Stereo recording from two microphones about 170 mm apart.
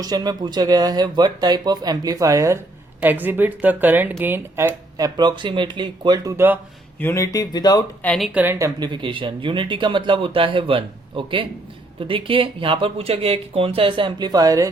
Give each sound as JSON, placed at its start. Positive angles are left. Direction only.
{"t": 0.0, "sound": "speech", "side_deg": -25}
{"t": 6.3, "sound": "speech", "side_deg": -10}
{"t": 7.0, "sound": "speech", "side_deg": 20}
{"t": 8.0, "sound": "speech", "side_deg": 5}
{"t": 8.3, "sound": "speech", "side_deg": -10}